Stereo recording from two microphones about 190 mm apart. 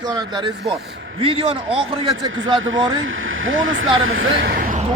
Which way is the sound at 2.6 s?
90° right.